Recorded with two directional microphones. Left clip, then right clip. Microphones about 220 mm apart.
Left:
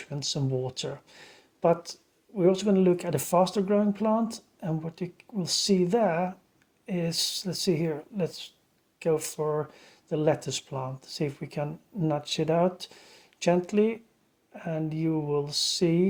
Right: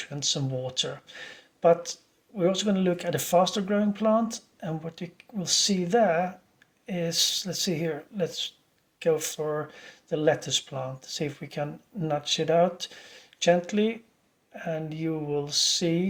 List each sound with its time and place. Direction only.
0.0 s speech: 45° left (ahead or behind)